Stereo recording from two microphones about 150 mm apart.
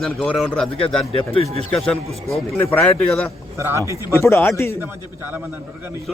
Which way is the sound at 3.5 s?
15° right (ahead or behind).